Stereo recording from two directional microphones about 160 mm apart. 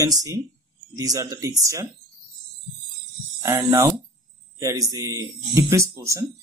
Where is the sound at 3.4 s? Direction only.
20° right (ahead or behind).